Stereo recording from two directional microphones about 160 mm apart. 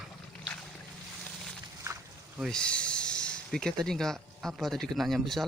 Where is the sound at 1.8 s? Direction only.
15° right (ahead or behind).